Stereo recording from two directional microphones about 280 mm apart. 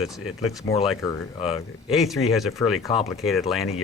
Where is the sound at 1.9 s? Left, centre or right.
Centre.